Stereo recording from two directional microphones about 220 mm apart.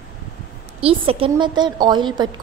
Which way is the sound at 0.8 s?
25° right (ahead or behind).